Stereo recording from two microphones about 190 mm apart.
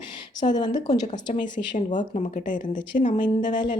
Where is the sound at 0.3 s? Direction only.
20° left (ahead or behind).